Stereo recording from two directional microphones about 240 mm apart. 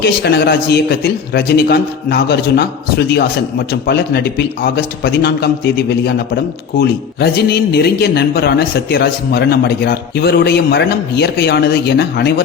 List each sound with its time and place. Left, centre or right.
0.0 s a man's voice: left